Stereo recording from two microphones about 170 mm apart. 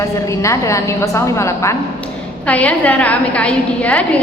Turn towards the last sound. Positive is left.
turn(degrees=10)  # may be behind; listen again after turning